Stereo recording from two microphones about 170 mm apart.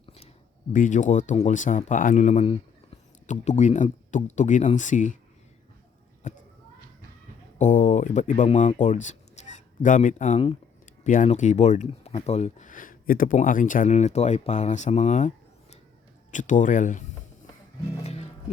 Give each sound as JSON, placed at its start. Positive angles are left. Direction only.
{"t": 0.7, "sound": "speech", "side_deg": 50}
{"t": 6.2, "sound": "speech", "side_deg": 45}
{"t": 7.6, "sound": "speech", "side_deg": 50}
{"t": 16.3, "sound": "speech", "side_deg": 50}
{"t": 18.0, "sound": "music", "side_deg": 40}